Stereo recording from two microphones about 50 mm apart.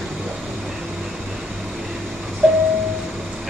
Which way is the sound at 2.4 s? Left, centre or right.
Right.